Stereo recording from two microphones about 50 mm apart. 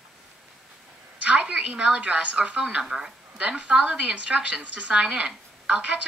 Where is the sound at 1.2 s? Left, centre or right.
Right.